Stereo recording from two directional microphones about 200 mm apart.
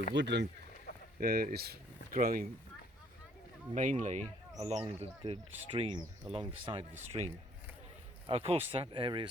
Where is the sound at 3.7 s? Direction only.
40° right (ahead or behind).